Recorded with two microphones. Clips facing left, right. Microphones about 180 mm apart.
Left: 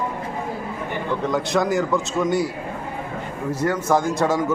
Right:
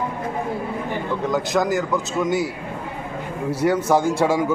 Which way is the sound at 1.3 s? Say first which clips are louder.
Even; centre (ahead or behind).